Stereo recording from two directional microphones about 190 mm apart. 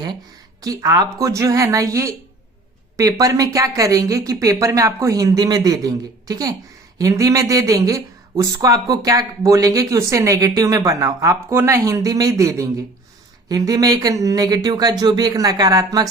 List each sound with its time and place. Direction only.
0.6 s speech: 20° right (ahead or behind)